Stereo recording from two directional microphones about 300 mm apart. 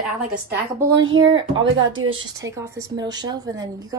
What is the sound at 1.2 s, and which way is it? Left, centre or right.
Speech, centre.